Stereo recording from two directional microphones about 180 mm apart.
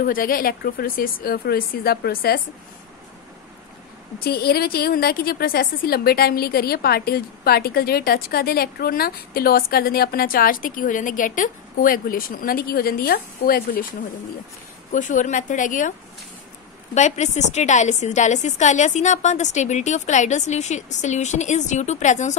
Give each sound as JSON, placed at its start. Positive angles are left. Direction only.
{"t": 0.0, "sound": "a woman's voice", "side_deg": 50}
{"t": 4.2, "sound": "a woman's voice", "side_deg": 60}
{"t": 14.9, "sound": "a woman's voice", "side_deg": 45}
{"t": 16.9, "sound": "a woman's voice", "side_deg": 40}